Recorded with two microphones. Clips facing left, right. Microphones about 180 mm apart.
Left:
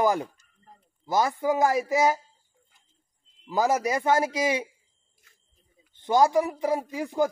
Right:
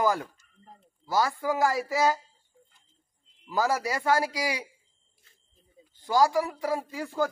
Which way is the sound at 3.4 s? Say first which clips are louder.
Left 3 dB; 20° left (ahead or behind).